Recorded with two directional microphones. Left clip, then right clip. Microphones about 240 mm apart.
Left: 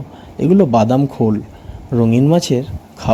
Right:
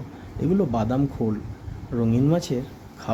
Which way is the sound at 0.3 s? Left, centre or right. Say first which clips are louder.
Left 12 dB; left.